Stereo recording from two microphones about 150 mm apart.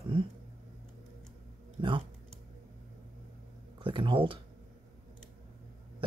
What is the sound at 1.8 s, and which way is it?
Music, 35° right (ahead or behind).